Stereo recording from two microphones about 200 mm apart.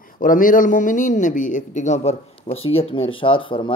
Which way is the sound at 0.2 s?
45° left (ahead or behind).